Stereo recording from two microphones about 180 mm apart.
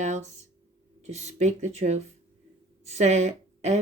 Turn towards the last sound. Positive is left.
turn(degrees=-40)  # may be behind; listen again after turning